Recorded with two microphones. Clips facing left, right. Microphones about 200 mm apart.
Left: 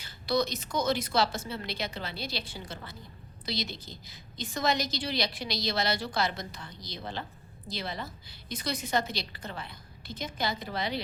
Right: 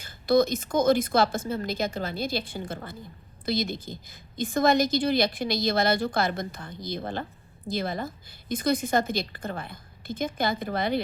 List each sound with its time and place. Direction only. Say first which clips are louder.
0.0 s a woman's voice: right 7 dB; 50° right (ahead or behind)